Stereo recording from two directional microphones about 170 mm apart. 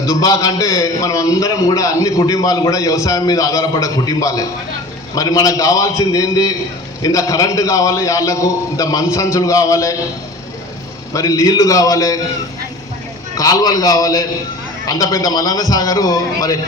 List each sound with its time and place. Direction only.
0.0 s a man's voice: 20° left (ahead or behind)
11.1 s a man's voice: 20° left (ahead or behind)
13.3 s a man's voice: 20° left (ahead or behind)